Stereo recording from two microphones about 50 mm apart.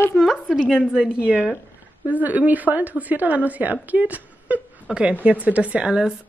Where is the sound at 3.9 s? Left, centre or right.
Right.